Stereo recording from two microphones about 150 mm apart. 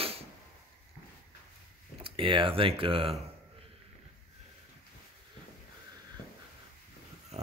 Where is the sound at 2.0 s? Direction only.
35° right (ahead or behind).